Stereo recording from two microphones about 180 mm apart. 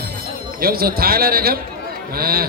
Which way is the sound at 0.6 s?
55° right (ahead or behind).